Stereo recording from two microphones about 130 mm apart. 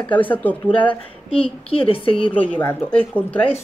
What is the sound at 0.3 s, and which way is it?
Speech, 10° left (ahead or behind).